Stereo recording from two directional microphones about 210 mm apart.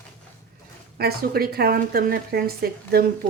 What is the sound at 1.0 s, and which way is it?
Speech, 45° right (ahead or behind).